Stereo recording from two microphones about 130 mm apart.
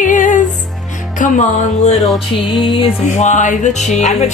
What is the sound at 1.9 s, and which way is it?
Music, centre (ahead or behind).